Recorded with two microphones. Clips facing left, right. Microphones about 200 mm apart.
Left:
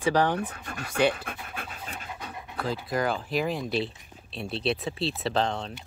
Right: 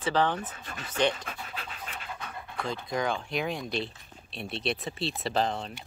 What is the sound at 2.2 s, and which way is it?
Dog, 15° left (ahead or behind).